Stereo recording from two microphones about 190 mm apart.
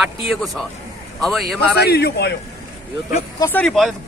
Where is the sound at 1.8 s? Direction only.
60° left (ahead or behind).